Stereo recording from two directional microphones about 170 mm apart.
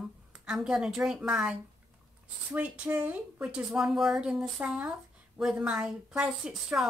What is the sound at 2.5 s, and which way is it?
A woman's voice, 10° right (ahead or behind).